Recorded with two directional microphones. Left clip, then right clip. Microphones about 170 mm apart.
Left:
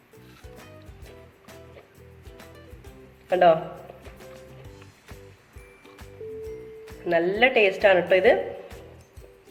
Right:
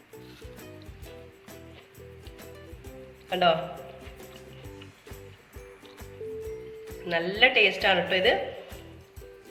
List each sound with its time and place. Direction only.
3.2 s a woman's voice: 40° left (ahead or behind)
4.3 s music: centre (ahead or behind)
7.0 s a woman's voice: 40° left (ahead or behind)